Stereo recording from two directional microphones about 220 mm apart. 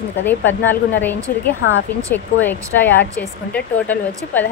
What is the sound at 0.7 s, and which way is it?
Speech, 10° left (ahead or behind).